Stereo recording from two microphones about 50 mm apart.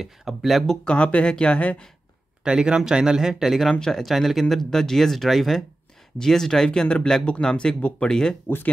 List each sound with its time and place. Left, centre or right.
0.0 s speech: centre
0.8 s speech: left
2.4 s speech: centre